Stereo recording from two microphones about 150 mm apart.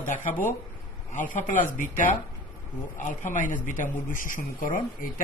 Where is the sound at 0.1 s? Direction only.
60° left (ahead or behind).